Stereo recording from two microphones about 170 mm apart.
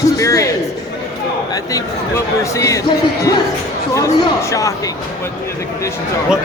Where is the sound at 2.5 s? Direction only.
20° left (ahead or behind).